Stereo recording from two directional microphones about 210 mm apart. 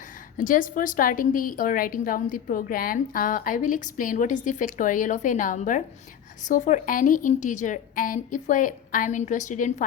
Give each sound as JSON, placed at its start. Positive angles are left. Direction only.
{"t": 0.3, "sound": "a woman's voice", "side_deg": 40}